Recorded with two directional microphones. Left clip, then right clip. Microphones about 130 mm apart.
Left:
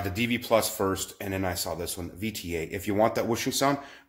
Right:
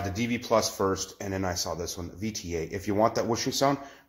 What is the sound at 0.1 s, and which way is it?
Speech, 15° left (ahead or behind).